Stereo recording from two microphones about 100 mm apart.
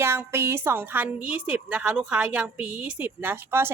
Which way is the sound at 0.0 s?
25° right (ahead or behind).